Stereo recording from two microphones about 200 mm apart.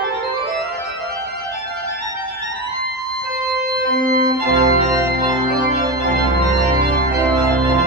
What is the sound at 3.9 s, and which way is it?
Organ, 50° right (ahead or behind).